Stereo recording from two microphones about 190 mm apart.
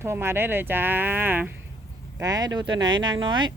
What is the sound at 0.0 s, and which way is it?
Speech, 15° right (ahead or behind).